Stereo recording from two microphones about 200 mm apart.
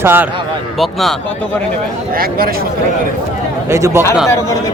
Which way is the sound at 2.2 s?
45° right (ahead or behind).